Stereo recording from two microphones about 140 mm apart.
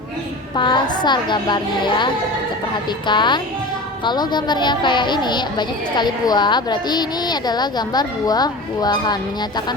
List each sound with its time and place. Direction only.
0.5 s a woman's voice: 35° left (ahead or behind)
3.1 s a woman's voice: 35° left (ahead or behind)